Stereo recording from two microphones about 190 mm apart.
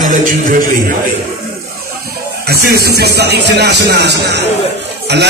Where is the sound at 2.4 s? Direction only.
55° right (ahead or behind).